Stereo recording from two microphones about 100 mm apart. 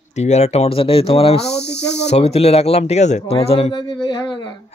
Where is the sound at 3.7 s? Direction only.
45° left (ahead or behind).